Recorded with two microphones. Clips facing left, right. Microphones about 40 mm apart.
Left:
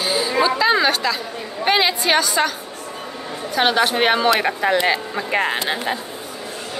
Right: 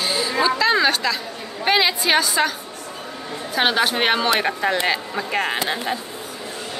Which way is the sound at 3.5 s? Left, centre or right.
Centre.